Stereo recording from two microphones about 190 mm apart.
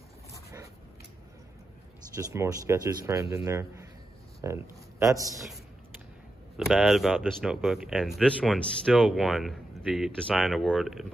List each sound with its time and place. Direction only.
2.1 s a man's voice: 15° right (ahead or behind)
6.5 s speech: centre (ahead or behind)